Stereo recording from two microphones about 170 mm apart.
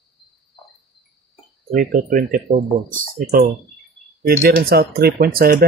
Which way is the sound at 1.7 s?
55° right (ahead or behind).